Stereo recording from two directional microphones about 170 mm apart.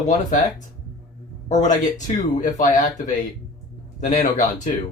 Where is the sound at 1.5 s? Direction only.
45° left (ahead or behind).